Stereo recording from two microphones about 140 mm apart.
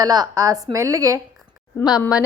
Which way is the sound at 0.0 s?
25° right (ahead or behind).